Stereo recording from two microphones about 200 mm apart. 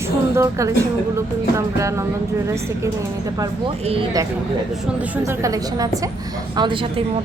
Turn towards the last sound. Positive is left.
turn(degrees=-25)  # may be behind; listen again after turning